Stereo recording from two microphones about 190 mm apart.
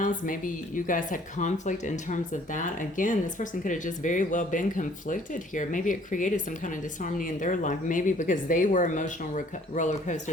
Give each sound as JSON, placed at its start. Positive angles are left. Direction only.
{"t": 0.0, "sound": "speech", "side_deg": 45}